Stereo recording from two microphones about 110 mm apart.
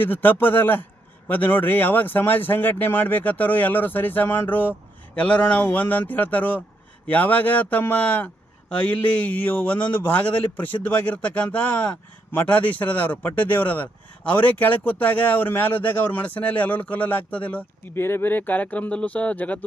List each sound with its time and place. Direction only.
0.0 s speech: 15° left (ahead or behind)